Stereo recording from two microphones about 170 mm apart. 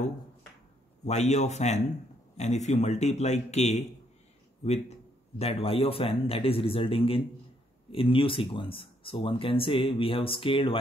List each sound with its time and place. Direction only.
1.0 s speech: 40° left (ahead or behind)